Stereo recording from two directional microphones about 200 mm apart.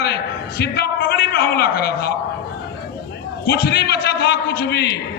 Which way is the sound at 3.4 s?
55° left (ahead or behind).